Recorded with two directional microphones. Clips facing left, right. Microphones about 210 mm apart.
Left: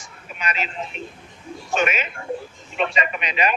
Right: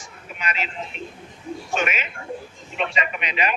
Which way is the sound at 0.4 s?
40° left (ahead or behind).